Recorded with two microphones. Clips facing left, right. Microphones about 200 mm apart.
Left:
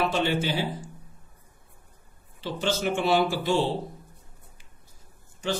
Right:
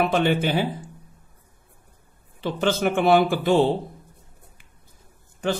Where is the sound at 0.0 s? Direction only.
55° right (ahead or behind).